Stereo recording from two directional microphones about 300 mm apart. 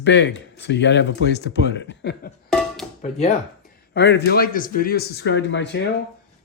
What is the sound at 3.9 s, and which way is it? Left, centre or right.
Speech, left.